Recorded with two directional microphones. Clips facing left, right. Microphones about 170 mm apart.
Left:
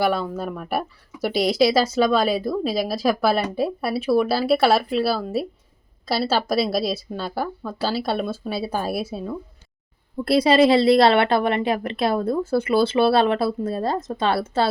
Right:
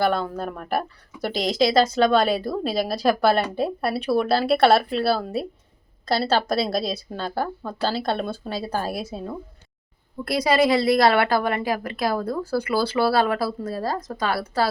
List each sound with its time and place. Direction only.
0.0 s speech: 5° left (ahead or behind)
10.2 s a woman's voice: 30° left (ahead or behind)